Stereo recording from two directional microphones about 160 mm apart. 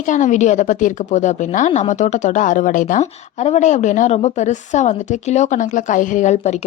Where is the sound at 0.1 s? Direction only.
50° left (ahead or behind).